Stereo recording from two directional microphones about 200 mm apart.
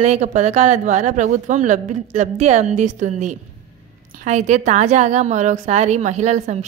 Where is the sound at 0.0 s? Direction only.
35° right (ahead or behind).